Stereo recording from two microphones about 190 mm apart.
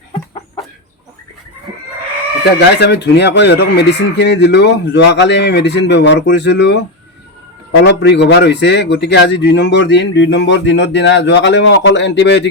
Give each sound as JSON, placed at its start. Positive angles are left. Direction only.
{"t": 2.4, "sound": "speech", "side_deg": 60}
{"t": 7.9, "sound": "speech", "side_deg": 65}